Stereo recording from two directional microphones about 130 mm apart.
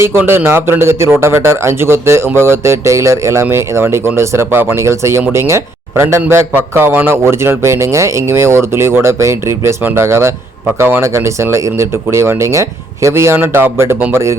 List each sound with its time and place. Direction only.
0.0 s a man's voice: 20° right (ahead or behind)